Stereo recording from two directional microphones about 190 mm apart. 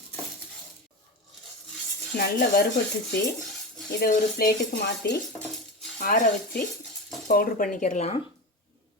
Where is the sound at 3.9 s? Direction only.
55° left (ahead or behind).